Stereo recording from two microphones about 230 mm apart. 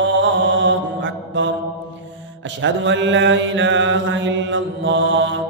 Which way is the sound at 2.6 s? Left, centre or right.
Right.